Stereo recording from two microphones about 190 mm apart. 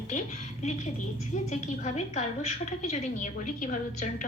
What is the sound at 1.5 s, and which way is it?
A woman's voice, 35° left (ahead or behind).